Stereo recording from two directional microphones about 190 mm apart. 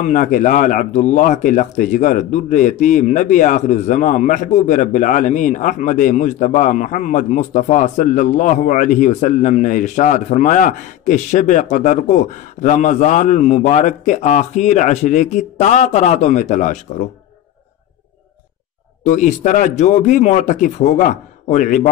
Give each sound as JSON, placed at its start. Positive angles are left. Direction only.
{"t": 0.0, "sound": "speech", "side_deg": 40}
{"t": 19.0, "sound": "speech", "side_deg": 40}